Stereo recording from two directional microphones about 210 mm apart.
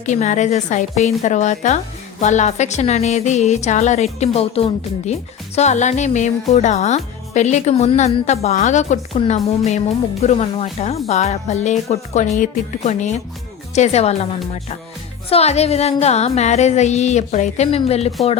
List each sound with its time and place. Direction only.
0.0 s speech: 35° left (ahead or behind)
15.3 s speech: 30° left (ahead or behind)